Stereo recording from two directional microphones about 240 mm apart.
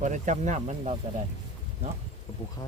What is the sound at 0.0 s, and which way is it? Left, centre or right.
Speech, right.